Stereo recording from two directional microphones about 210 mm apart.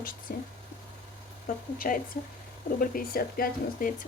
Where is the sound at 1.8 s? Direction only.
40° left (ahead or behind).